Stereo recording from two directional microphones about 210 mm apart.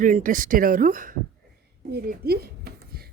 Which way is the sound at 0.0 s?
40° right (ahead or behind).